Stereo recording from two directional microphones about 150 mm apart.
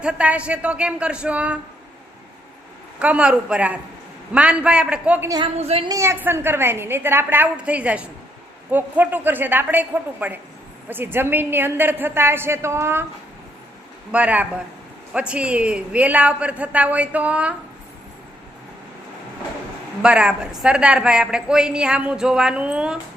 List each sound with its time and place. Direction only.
0.0 s a man's voice: 5° right (ahead or behind)
3.0 s a man's voice: 5° right (ahead or behind)
5.5 s speech: 40° right (ahead or behind)
5.9 s a man's voice: 20° right (ahead or behind)
14.1 s a man's voice: 10° right (ahead or behind)
20.0 s a woman's voice: 5° right (ahead or behind)